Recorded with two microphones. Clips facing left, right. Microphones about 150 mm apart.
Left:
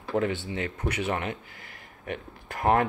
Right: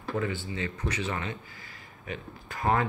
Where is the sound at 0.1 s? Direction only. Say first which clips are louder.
Left 4 dB; 70° left (ahead or behind).